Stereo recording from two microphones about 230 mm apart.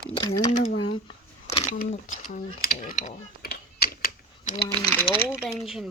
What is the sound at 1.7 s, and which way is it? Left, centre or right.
Speech, left.